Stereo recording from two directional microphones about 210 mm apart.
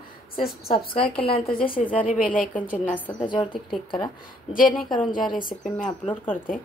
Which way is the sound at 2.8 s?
5° left (ahead or behind).